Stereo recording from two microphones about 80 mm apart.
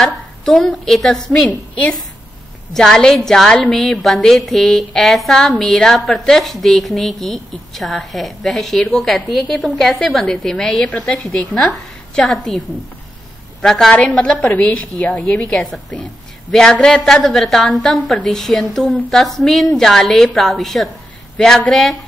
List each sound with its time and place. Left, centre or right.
0.0 s a woman's voice: centre
1.5 s a woman's voice: centre
13.6 s a woman's voice: centre
13.9 s a woman's voice: centre
15.5 s a woman's voice: centre